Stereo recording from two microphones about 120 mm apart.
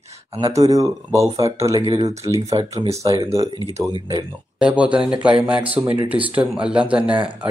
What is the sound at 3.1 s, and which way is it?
Speech, 55° right (ahead or behind).